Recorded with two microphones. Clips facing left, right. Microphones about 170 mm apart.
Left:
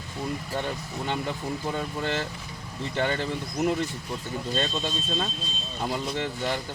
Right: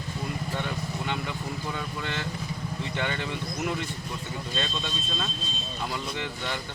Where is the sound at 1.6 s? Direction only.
35° left (ahead or behind).